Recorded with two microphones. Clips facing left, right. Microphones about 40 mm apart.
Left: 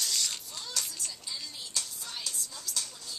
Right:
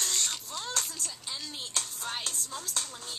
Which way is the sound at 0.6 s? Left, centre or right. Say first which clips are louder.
Right 3 dB; right.